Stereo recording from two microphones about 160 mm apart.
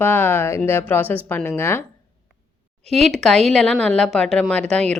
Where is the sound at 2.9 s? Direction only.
Centre (ahead or behind).